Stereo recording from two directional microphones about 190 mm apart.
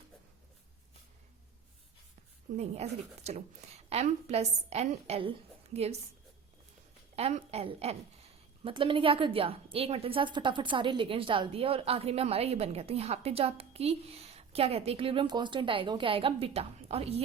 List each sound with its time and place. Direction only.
2.6 s a woman's voice: 35° right (ahead or behind)
7.2 s a woman's voice: 30° right (ahead or behind)